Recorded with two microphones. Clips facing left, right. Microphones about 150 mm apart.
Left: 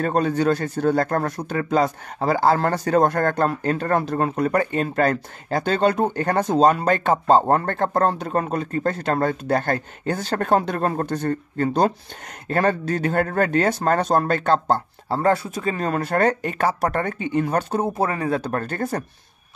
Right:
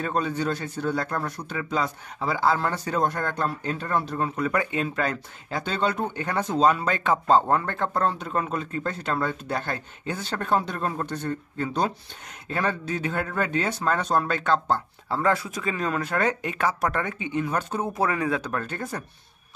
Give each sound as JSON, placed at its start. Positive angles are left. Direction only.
{"t": 0.0, "sound": "speech", "side_deg": 45}